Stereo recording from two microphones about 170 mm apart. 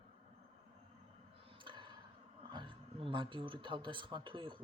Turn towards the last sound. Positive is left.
turn(degrees=-30)  # may be behind; listen again after turning